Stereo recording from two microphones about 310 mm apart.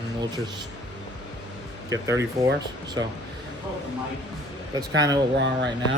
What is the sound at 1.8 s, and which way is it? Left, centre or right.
Speech, centre.